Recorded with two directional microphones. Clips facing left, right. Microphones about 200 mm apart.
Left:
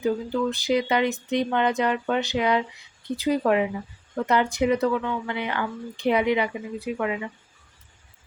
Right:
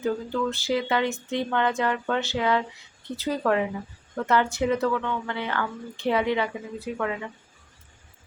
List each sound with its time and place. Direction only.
0.0 s speech: 15° left (ahead or behind)